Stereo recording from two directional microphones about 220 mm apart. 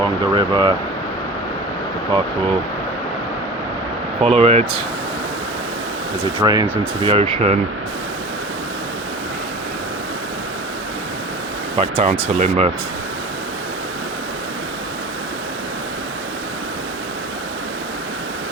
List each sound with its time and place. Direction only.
0.0 s speech: 20° right (ahead or behind)
4.2 s speech: 25° right (ahead or behind)
6.4 s speech: 15° right (ahead or behind)
11.8 s speech: 25° right (ahead or behind)